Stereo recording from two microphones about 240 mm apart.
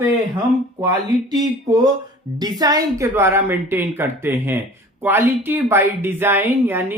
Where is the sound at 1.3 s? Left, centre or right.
Centre.